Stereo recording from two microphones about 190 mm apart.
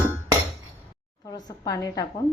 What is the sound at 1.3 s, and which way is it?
Speech, 20° left (ahead or behind).